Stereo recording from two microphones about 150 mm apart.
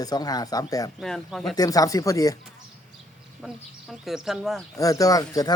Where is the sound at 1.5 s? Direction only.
25° left (ahead or behind).